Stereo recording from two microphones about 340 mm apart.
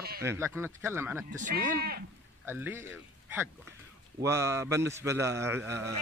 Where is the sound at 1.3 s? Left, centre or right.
Right.